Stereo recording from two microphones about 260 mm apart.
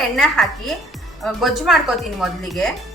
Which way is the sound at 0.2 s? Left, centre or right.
Centre.